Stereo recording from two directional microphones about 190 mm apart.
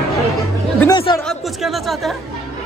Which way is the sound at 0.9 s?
25° left (ahead or behind).